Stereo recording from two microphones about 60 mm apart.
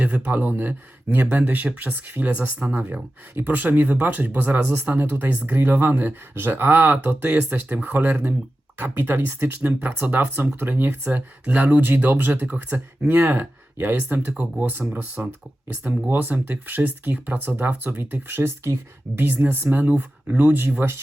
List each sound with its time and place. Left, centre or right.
0.0 s speech: right
9.6 s speech: right